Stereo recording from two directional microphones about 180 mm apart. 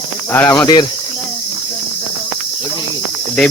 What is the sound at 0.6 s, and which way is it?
Speech, 25° left (ahead or behind).